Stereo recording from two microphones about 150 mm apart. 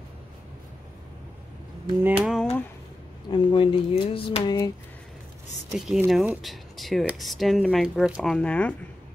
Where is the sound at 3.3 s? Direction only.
30° left (ahead or behind).